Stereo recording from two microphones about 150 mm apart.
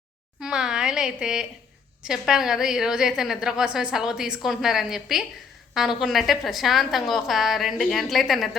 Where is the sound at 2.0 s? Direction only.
5° right (ahead or behind).